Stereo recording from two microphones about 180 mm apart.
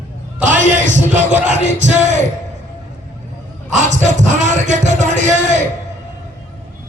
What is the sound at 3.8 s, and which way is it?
A man's voice, 40° right (ahead or behind).